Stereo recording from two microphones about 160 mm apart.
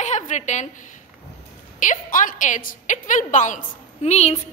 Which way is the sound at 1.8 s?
55° left (ahead or behind).